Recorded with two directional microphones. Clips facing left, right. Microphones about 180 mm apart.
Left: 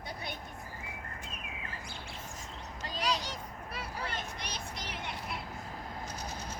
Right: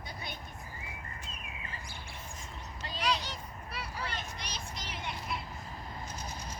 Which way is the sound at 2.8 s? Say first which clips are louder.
Even; 40° left (ahead or behind).